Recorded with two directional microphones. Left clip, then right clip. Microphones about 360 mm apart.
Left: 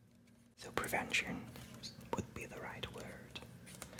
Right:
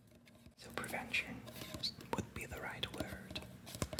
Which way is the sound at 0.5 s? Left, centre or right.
Left.